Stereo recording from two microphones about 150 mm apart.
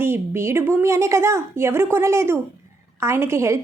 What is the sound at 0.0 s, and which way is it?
A woman's voice, 15° right (ahead or behind).